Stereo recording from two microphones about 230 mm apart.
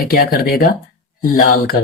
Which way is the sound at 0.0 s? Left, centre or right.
Left.